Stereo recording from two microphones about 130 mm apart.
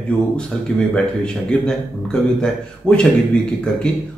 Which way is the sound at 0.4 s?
5° left (ahead or behind).